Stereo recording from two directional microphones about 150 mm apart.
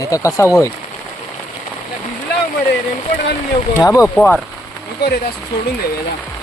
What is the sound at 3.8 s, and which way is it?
Speech, 20° left (ahead or behind).